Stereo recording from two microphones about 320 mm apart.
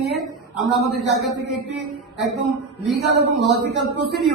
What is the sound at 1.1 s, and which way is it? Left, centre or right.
Speech, centre.